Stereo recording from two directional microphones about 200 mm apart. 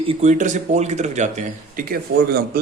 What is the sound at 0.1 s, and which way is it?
Speech, 35° right (ahead or behind).